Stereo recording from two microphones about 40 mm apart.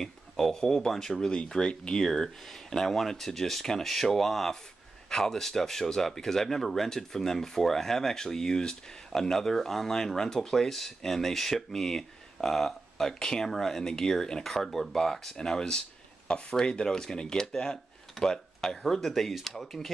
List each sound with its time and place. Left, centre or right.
0.0 s speech: centre
1.3 s speech: left; by 13.1 s centre
13.2 s speech: centre